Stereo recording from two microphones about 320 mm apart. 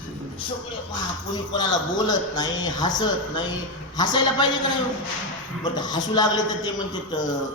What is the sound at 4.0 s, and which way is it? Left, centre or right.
Speech, centre.